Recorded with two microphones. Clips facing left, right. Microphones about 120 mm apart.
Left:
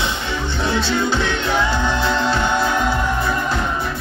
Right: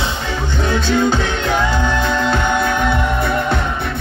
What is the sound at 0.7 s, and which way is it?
Music, 45° right (ahead or behind).